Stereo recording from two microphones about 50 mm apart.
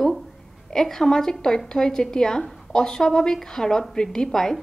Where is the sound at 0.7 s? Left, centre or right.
Centre.